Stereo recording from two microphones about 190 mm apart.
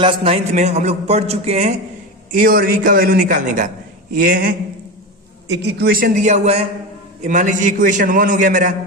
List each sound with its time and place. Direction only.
0.0 s a man's voice: 30° right (ahead or behind)
2.3 s a man's voice: 50° right (ahead or behind)
5.5 s a man's voice: 60° right (ahead or behind); by 8.7 s 45° right (ahead or behind)